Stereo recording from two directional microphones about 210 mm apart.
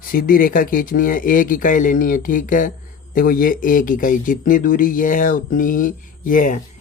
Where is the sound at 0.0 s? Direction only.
45° left (ahead or behind).